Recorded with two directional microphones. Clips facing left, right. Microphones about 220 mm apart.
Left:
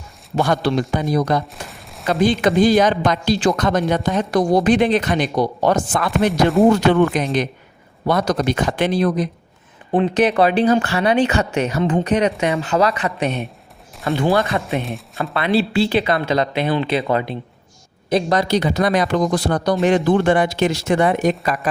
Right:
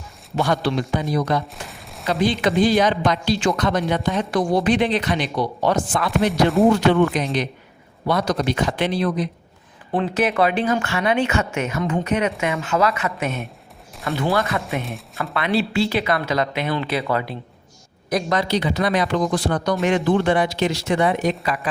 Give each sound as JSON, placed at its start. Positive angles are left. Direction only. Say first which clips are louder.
{"t": 0.3, "sound": "speech", "louder": "left 3 dB", "side_deg": 45}
{"t": 1.6, "sound": "fusillade", "louder": "left 1 dB", "side_deg": 0}
{"t": 2.0, "sound": "speech", "louder": "left 3 dB", "side_deg": 50}
{"t": 6.6, "sound": "speech", "louder": "left 3 dB", "side_deg": 0}
{"t": 7.1, "sound": "speech", "louder": "left 3 dB", "side_deg": 50}
{"t": 9.9, "sound": "speech", "louder": "left 5 dB", "side_deg": 20}
{"t": 10.2, "sound": "speech", "louder": "left 4 dB", "side_deg": 30}
{"t": 14.3, "sound": "speech", "louder": "left 3 dB", "side_deg": 30}
{"t": 14.8, "sound": "speech", "louder": "left 3 dB", "side_deg": 0}
{"t": 15.2, "sound": "speech", "louder": "left 3 dB", "side_deg": 30}
{"t": 18.1, "sound": "speech", "louder": "left 4 dB", "side_deg": 35}